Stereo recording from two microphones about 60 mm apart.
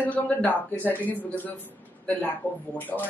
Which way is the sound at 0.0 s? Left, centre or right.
Left.